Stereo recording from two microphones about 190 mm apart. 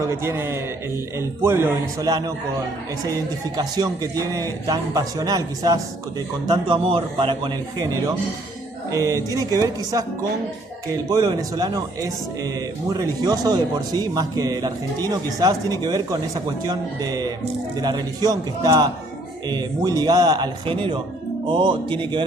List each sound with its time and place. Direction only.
0.0 s music: 15° right (ahead or behind)
3.1 s speech: 20° right (ahead or behind)
8.9 s music: 15° right (ahead or behind)
10.9 s speech: 20° right (ahead or behind)